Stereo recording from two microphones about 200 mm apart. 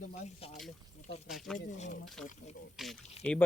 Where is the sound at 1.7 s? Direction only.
35° left (ahead or behind).